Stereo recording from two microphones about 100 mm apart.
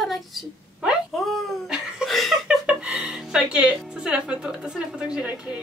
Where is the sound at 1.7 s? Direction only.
5° right (ahead or behind).